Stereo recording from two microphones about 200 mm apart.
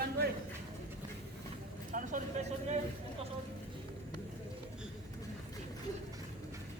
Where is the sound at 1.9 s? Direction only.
40° right (ahead or behind).